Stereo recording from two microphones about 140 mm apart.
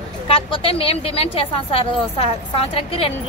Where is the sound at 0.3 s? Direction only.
40° left (ahead or behind).